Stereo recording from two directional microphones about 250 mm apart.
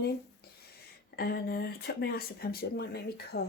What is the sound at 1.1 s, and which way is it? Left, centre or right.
Speech, left.